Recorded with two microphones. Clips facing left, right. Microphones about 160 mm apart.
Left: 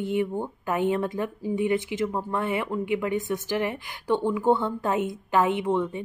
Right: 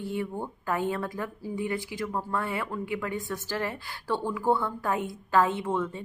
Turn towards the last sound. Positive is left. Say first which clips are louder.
# left 4 dB
turn(degrees=20)  # may be behind; listen again after turning